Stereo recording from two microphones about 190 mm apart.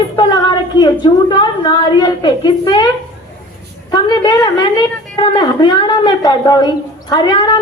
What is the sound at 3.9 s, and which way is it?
A woman's voice, 20° left (ahead or behind).